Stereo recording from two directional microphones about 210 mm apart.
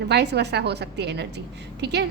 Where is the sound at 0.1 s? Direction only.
50° right (ahead or behind).